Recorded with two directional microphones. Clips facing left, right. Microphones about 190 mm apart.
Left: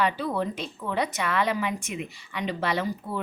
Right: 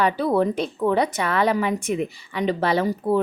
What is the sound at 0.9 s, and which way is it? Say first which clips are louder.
Speech: right 5 dB; 35° right (ahead or behind).